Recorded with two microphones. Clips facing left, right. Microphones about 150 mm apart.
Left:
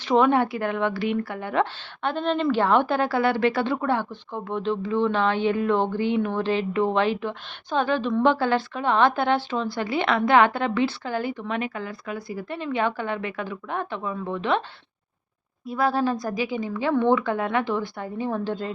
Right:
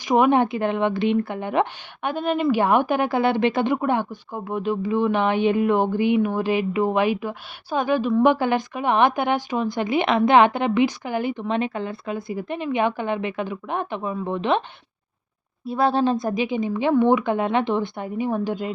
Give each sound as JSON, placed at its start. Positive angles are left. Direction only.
{"t": 0.0, "sound": "speech", "side_deg": -15}
{"t": 15.6, "sound": "speech", "side_deg": -30}